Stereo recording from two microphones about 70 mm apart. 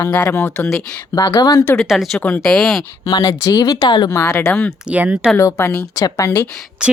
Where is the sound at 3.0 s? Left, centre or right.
Left.